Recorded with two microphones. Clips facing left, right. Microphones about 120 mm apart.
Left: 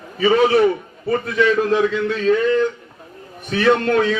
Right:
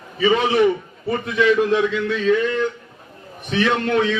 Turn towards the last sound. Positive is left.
turn(degrees=40)  # may be behind; listen again after turning